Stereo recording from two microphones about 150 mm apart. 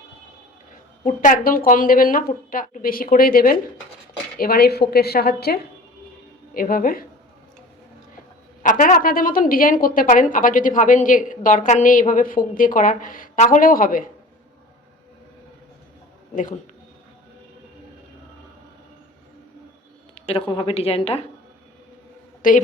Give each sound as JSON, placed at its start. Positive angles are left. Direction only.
{"t": 1.0, "sound": "speech", "side_deg": 60}
{"t": 4.4, "sound": "a woman's voice", "side_deg": 90}
{"t": 6.5, "sound": "speech", "side_deg": 70}
{"t": 8.6, "sound": "a woman's voice", "side_deg": 60}
{"t": 16.3, "sound": "a man's voice", "side_deg": 60}
{"t": 20.1, "sound": "a woman's voice", "side_deg": 40}
{"t": 22.4, "sound": "a woman's voice", "side_deg": 60}